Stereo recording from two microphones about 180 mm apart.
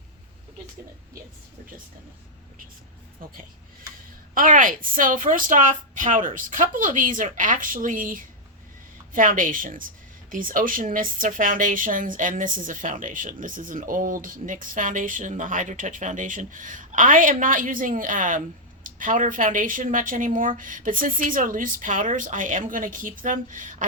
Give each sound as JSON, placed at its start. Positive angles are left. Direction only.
{"t": 4.4, "sound": "a woman's voice", "side_deg": -50}